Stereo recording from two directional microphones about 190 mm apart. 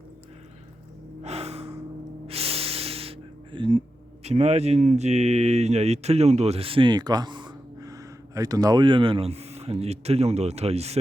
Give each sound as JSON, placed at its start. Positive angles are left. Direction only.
{"t": 1.2, "sound": "gasp", "side_deg": -35}
{"t": 2.2, "sound": "music", "side_deg": -30}
{"t": 4.2, "sound": "speech", "side_deg": -35}